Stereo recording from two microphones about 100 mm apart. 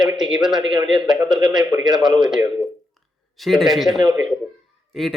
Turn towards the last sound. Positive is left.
turn(degrees=0)  # may be behind; listen again after turning